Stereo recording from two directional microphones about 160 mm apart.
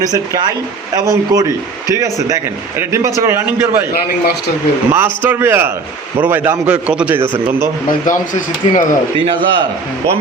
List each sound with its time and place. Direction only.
1.0 s a man's voice: 20° right (ahead or behind)
4.9 s a man's voice: 15° right (ahead or behind)
8.0 s speech: 55° left (ahead or behind)
9.1 s a man's voice: 35° right (ahead or behind)